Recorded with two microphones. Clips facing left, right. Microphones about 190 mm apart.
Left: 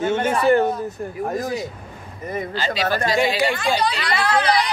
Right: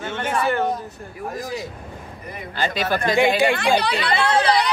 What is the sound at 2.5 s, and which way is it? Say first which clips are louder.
Speech: right 2 dB; 50° right (ahead or behind).